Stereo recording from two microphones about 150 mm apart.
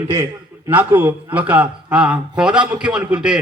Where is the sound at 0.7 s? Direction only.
10° right (ahead or behind).